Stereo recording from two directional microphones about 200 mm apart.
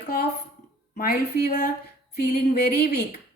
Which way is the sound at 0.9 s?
50° left (ahead or behind).